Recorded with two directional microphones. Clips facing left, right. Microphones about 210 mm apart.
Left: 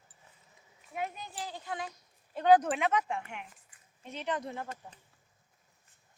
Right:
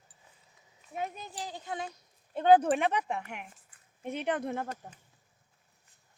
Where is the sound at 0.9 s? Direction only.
20° right (ahead or behind).